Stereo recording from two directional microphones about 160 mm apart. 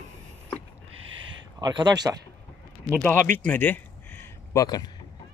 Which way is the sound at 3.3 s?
10° left (ahead or behind).